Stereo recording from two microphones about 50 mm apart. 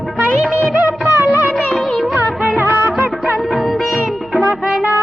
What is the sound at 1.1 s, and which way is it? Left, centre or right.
Music, right.